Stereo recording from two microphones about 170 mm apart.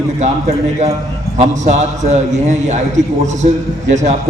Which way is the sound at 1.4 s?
45° right (ahead or behind).